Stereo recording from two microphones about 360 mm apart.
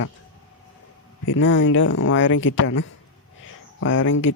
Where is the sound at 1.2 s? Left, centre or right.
Left.